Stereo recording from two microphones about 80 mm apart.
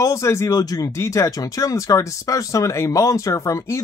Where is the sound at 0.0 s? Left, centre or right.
Left.